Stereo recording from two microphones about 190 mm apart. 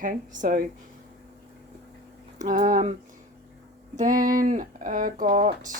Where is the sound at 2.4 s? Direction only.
45° right (ahead or behind).